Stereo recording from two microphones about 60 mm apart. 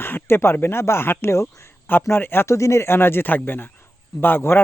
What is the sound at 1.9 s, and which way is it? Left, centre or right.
Speech, left.